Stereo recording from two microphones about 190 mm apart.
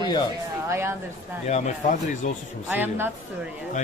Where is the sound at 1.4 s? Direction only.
40° left (ahead or behind).